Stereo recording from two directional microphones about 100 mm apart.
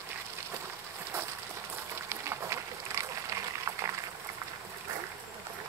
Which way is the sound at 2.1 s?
25° right (ahead or behind).